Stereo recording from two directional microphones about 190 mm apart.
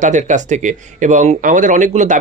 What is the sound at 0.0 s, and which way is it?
Speech, 40° right (ahead or behind).